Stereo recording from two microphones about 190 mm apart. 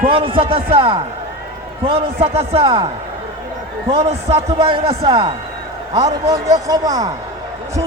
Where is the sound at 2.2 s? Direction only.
35° right (ahead or behind).